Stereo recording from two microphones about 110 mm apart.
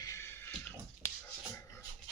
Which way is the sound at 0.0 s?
25° left (ahead or behind).